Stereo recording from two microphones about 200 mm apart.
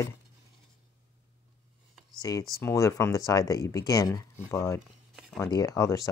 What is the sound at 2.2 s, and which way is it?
Speech, 20° left (ahead or behind).